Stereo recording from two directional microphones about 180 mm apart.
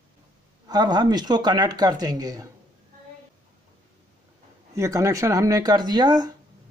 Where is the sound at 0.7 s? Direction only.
25° right (ahead or behind).